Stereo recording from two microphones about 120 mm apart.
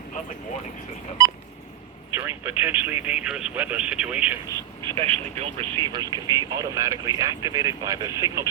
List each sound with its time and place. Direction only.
2.2 s speech: 15° right (ahead or behind)
4.8 s speech: 45° right (ahead or behind)
5.7 s speech: 40° right (ahead or behind)